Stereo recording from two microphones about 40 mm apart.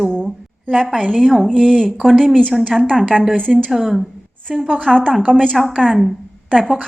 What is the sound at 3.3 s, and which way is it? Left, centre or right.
Speech, left.